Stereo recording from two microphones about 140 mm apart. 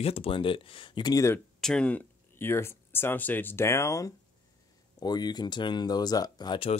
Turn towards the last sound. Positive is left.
turn(degrees=30)  # may be behind; listen again after turning